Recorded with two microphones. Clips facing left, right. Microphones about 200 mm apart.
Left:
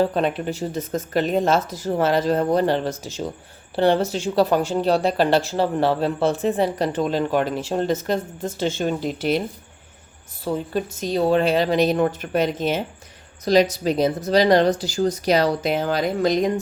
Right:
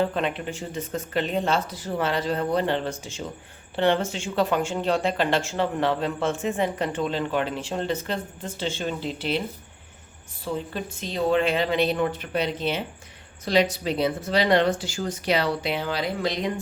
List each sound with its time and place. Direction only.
0.0 s speech: 40° left (ahead or behind)
10.4 s speech: 40° left (ahead or behind)